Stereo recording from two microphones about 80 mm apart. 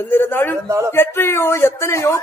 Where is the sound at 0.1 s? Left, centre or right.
Left.